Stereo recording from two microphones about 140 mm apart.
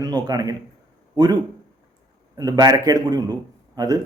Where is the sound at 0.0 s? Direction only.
30° right (ahead or behind).